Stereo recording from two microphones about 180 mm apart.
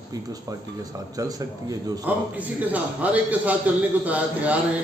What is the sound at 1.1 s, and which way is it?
Speech, 20° right (ahead or behind).